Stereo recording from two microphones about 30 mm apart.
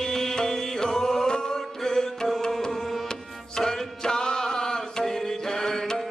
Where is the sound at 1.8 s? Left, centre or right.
Centre.